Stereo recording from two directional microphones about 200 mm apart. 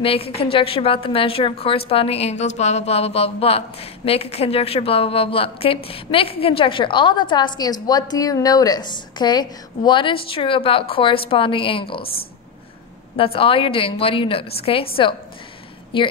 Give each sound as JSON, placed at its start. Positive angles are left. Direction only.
{"t": 0.0, "sound": "a woman's voice", "side_deg": 30}
{"t": 13.1, "sound": "a woman's voice", "side_deg": 25}